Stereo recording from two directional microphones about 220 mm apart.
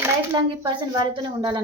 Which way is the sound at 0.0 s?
15° right (ahead or behind).